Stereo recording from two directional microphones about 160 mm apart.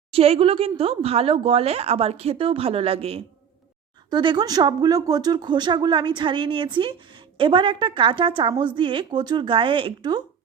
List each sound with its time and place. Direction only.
0.1 s speech: 35° right (ahead or behind)